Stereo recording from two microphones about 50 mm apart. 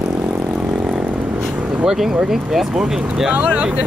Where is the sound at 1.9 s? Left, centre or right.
Centre.